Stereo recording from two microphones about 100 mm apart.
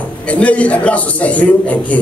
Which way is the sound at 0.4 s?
15° left (ahead or behind).